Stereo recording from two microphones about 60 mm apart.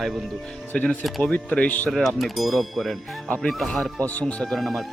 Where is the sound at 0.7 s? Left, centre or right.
Left.